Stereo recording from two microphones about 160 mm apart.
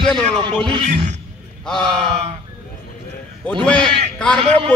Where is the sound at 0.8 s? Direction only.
45° right (ahead or behind).